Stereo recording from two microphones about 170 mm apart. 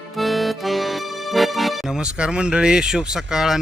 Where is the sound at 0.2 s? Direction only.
Centre (ahead or behind).